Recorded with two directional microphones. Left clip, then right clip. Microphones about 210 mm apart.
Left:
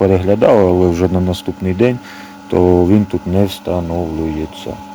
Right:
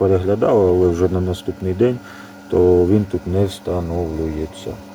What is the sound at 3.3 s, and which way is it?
Speech, 35° left (ahead or behind).